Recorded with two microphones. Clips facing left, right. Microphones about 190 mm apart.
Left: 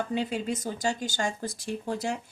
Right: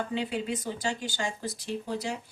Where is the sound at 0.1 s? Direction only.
45° left (ahead or behind).